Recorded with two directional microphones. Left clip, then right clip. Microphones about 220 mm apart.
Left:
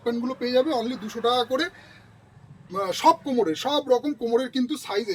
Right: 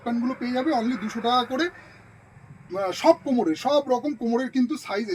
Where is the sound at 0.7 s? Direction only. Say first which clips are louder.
Right 2 dB; 25° left (ahead or behind).